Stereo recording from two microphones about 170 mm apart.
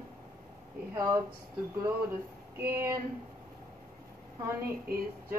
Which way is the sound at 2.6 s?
15° right (ahead or behind).